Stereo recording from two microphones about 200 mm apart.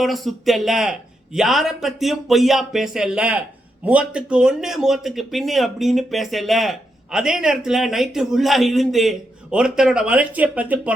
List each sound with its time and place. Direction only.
0.0 s speech: centre (ahead or behind)